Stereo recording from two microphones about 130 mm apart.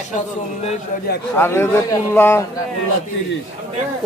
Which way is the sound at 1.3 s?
20° left (ahead or behind).